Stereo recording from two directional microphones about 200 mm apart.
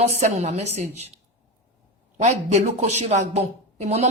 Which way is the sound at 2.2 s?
35° right (ahead or behind).